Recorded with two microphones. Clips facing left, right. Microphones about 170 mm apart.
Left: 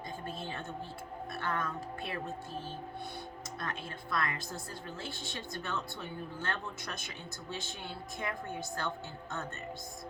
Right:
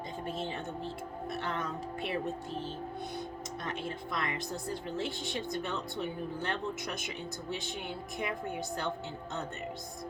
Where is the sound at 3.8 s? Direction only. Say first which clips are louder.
Left 1 dB; 20° right (ahead or behind).